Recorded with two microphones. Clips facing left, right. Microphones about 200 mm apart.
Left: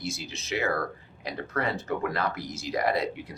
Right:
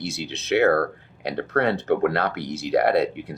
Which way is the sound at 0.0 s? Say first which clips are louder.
Right 5 dB; 70° right (ahead or behind).